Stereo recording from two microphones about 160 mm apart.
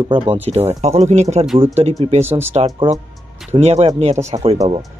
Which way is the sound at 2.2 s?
15° right (ahead or behind).